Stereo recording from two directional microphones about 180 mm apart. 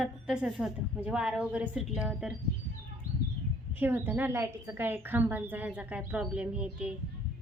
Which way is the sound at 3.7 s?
10° right (ahead or behind).